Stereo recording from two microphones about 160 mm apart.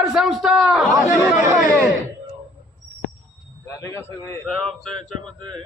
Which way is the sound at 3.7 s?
20° left (ahead or behind).